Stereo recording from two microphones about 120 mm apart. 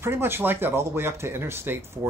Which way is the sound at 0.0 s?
20° right (ahead or behind).